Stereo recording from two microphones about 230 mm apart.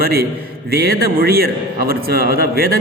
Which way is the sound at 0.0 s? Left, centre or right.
Right.